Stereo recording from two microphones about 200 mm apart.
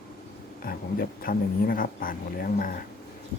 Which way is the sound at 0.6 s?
45° left (ahead or behind).